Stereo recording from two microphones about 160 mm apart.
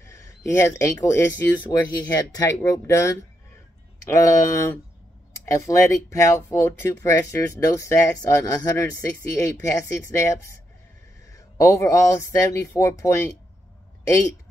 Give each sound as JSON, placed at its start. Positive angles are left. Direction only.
{"t": 0.1, "sound": "speech", "side_deg": 20}